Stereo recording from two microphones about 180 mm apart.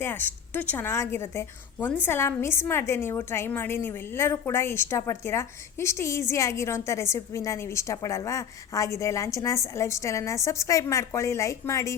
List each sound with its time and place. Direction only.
0.0 s a woman's voice: 10° left (ahead or behind)